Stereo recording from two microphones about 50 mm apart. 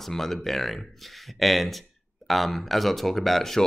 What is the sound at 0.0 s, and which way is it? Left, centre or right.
Speech, centre.